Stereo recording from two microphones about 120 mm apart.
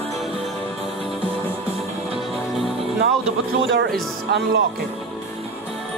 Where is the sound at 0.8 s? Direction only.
50° right (ahead or behind).